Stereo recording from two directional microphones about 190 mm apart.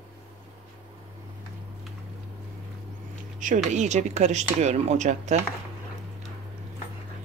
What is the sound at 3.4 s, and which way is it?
Speech, 40° right (ahead or behind).